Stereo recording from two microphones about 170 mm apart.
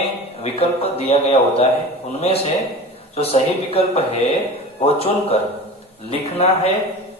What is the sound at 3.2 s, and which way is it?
Speech, 35° left (ahead or behind).